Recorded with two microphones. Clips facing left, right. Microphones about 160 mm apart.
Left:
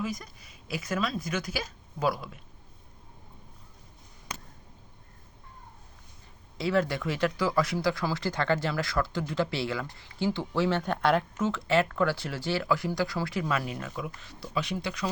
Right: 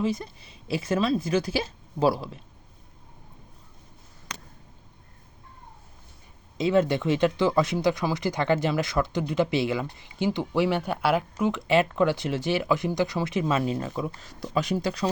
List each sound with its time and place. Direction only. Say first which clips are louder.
0.0 s speech: right 7 dB; 30° right (ahead or behind)
6.6 s speech: right 5 dB; 20° right (ahead or behind); by 15.0 s 40° right (ahead or behind)